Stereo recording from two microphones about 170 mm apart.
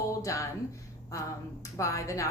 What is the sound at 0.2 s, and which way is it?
Speech, 20° left (ahead or behind).